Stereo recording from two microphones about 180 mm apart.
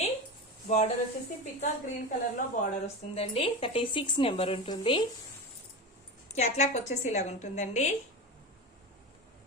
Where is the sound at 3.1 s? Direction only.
35° left (ahead or behind).